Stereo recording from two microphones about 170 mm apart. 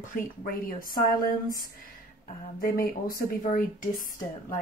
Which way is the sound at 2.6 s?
60° left (ahead or behind).